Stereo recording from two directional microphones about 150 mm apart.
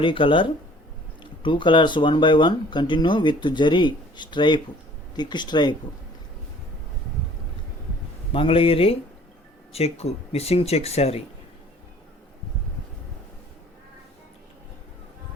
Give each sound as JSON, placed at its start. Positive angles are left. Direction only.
{"t": 0.0, "sound": "speech", "side_deg": 35}
{"t": 8.3, "sound": "speech", "side_deg": 35}